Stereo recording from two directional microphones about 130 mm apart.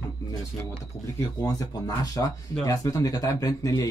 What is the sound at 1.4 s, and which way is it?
Speech, 25° left (ahead or behind).